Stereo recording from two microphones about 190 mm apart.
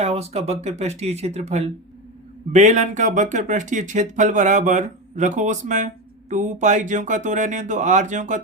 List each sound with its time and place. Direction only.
0.0 s speech: 35° right (ahead or behind)